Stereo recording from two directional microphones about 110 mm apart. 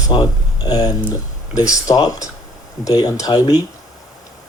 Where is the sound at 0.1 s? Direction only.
35° left (ahead or behind).